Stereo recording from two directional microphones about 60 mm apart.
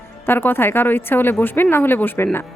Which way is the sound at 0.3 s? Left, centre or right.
Left.